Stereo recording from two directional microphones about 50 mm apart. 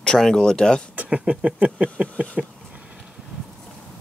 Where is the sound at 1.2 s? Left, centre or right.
Centre.